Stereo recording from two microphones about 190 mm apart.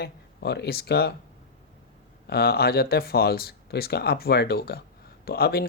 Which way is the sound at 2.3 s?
55° left (ahead or behind).